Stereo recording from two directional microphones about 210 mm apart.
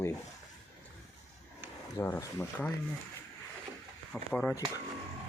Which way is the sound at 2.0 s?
15° left (ahead or behind).